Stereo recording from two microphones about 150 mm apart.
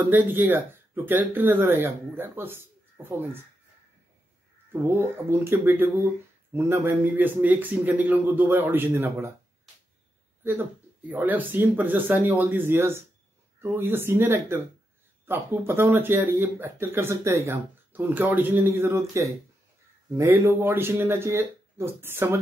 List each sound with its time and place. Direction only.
0.1 s speech: 10° right (ahead or behind)
4.8 s speech: 15° right (ahead or behind)
10.4 s speech: 15° right (ahead or behind)